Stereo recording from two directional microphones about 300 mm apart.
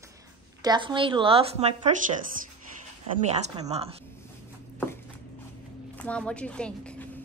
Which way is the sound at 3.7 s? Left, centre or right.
Centre.